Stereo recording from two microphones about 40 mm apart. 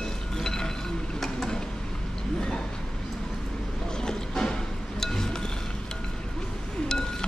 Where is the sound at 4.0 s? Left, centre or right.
Centre.